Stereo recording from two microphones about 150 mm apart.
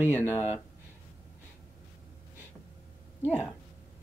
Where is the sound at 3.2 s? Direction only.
10° left (ahead or behind).